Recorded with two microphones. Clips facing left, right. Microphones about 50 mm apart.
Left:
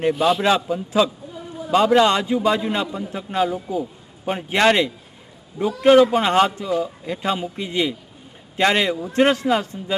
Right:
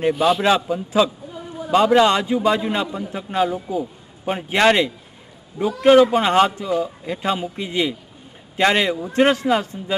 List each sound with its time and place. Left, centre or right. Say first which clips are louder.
0.0 s a man's voice: right 1 dB; centre
1.3 s a sound: right 1 dB; centre
1.7 s a man's voice: right 1 dB; centre